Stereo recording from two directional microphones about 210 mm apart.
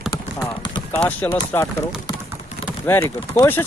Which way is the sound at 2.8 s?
10° left (ahead or behind).